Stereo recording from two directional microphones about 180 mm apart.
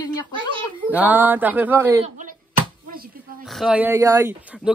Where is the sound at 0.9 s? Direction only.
10° right (ahead or behind).